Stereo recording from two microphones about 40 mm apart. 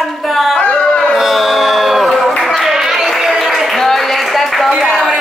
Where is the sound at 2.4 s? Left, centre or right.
Centre.